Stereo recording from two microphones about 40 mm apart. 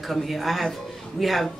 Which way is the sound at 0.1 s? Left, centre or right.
Centre.